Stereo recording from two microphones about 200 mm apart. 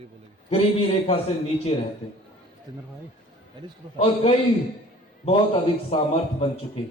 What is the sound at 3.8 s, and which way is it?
Speech, 25° right (ahead or behind).